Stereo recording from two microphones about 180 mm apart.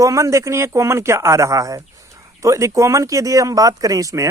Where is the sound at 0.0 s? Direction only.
15° right (ahead or behind).